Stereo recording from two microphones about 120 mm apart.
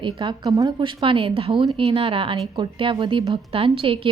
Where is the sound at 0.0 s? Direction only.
40° right (ahead or behind).